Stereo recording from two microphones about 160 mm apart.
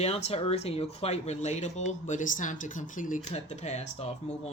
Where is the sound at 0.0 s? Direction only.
40° left (ahead or behind).